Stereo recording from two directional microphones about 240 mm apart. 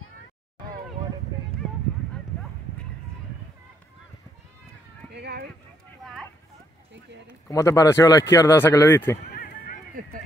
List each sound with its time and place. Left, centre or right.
5.1 s speech: right
7.4 s speech: centre
9.3 s a sound: left